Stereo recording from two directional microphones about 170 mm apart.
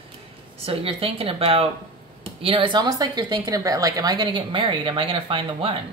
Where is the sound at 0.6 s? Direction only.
35° right (ahead or behind).